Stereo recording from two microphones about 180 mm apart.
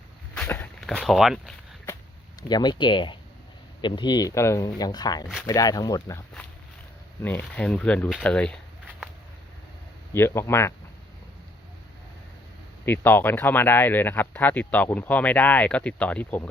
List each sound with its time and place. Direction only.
0.3 s walk: 10° left (ahead or behind)
2.5 s speech: 25° left (ahead or behind); by 8.5 s 5° left (ahead or behind)
10.1 s speech: 15° left (ahead or behind)
12.8 s speech: 10° left (ahead or behind)